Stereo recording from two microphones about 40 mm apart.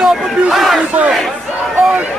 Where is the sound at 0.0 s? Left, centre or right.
Centre.